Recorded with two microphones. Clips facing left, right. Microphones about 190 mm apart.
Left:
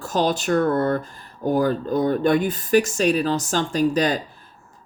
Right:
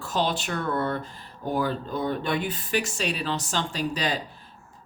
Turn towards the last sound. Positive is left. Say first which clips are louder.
# left 8 dB
turn(degrees=45)  # may be behind; listen again after turning